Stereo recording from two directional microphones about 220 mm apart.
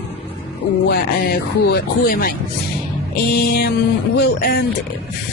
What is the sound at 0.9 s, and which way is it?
Speech, 45° left (ahead or behind).